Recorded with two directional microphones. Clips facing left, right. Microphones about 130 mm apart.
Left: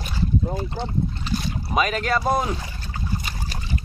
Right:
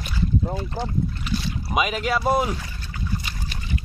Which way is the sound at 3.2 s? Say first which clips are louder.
Left 2 dB; 40° left (ahead or behind).